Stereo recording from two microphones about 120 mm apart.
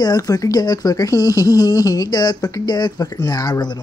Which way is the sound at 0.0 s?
30° left (ahead or behind).